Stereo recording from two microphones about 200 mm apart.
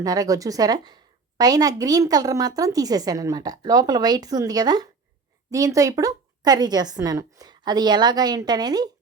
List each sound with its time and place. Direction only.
0.0 s a woman's voice: 20° right (ahead or behind)